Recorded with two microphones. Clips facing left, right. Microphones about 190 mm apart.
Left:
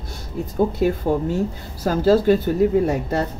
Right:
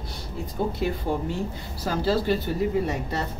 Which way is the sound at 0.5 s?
45° left (ahead or behind).